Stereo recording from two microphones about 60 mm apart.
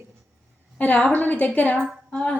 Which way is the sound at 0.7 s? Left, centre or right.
Left.